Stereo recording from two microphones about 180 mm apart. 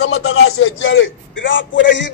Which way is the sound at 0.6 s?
90° left.